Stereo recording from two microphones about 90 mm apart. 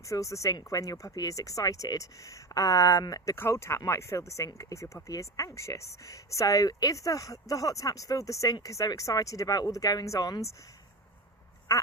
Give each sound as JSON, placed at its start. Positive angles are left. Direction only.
{"t": 0.0, "sound": "speech", "side_deg": 35}
{"t": 3.3, "sound": "speech", "side_deg": 30}
{"t": 11.7, "sound": "a sound", "side_deg": 30}